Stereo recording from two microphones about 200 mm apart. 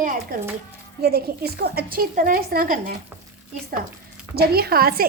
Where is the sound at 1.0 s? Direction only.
50° right (ahead or behind).